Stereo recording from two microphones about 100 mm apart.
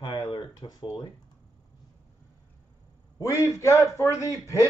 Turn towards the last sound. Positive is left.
turn(degrees=30)  # may be behind; listen again after turning